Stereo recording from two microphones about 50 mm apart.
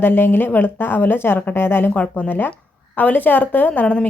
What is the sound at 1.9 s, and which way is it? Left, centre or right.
Speech, left.